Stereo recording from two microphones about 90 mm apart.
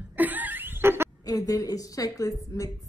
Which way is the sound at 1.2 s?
40° left (ahead or behind).